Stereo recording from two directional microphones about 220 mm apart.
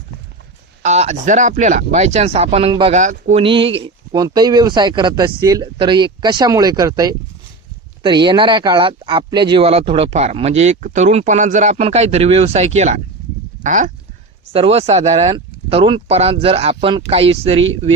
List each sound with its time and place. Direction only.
0.8 s speech: 30° right (ahead or behind)